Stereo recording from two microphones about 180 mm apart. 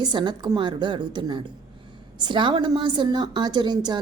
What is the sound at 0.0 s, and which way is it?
A woman's voice, 25° right (ahead or behind).